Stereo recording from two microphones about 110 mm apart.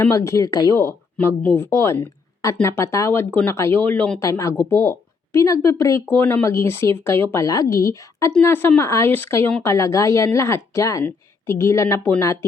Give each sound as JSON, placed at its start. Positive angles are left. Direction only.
{"t": 0.0, "sound": "speech", "side_deg": 25}
{"t": 4.2, "sound": "speech", "side_deg": 30}